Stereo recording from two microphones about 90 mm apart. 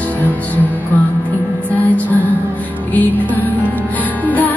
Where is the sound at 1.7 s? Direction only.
15° left (ahead or behind).